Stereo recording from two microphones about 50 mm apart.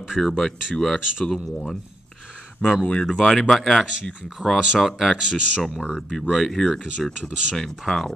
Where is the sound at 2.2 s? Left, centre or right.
Centre.